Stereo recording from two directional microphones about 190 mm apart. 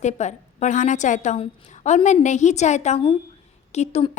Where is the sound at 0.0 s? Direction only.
35° left (ahead or behind).